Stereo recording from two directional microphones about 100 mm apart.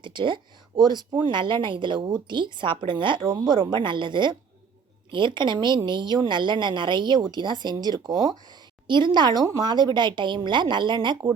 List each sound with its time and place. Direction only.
0.0 s a woman's voice: 50° right (ahead or behind)